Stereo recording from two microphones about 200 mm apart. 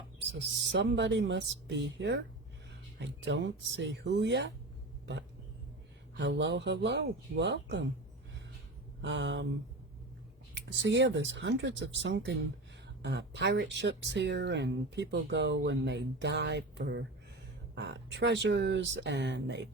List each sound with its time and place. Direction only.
0.7 s speech: 65° right (ahead or behind)
6.1 s speech: 65° right (ahead or behind)
9.0 s speech: 65° right (ahead or behind)
10.5 s speech: 60° right (ahead or behind)